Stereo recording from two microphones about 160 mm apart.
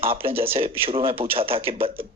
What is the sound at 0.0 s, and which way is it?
A man's voice, 35° right (ahead or behind).